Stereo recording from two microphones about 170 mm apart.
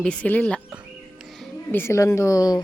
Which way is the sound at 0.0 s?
5° left (ahead or behind).